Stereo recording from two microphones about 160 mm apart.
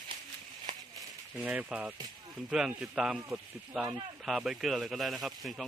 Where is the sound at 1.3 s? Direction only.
5° right (ahead or behind).